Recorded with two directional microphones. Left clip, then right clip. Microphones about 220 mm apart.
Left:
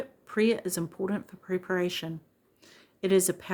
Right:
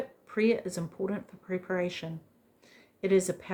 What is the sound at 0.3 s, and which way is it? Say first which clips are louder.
Speech: left 1 dB; 45° left (ahead or behind).